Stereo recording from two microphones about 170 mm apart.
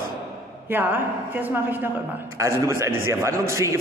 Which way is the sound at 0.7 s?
10° right (ahead or behind).